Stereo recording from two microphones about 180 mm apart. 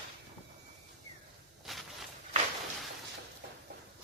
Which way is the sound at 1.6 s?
Centre (ahead or behind).